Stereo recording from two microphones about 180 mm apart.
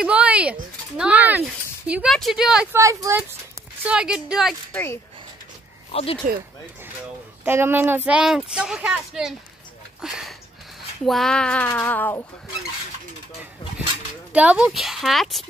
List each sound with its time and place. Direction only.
0.0 s speech: 5° right (ahead or behind)
2.8 s speech: 15° right (ahead or behind)
3.8 s speech: 5° right (ahead or behind)
5.9 s speech: 35° left (ahead or behind)
7.4 s speech: 10° right (ahead or behind); by 12.3 s 10° left (ahead or behind)
14.3 s speech: 5° right (ahead or behind)